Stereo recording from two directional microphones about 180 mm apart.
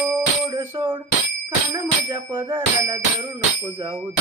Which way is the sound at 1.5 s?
20° right (ahead or behind).